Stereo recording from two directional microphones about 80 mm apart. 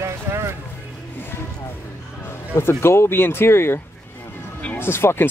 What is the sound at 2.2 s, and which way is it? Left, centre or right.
Speech, left.